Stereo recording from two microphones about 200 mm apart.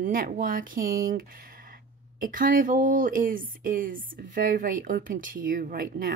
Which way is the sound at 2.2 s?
45° right (ahead or behind).